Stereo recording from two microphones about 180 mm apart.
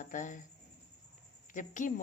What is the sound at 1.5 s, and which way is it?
Speech, 45° left (ahead or behind).